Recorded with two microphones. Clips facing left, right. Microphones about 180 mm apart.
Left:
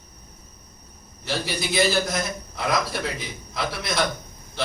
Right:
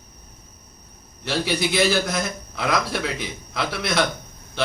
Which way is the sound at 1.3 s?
65° right (ahead or behind).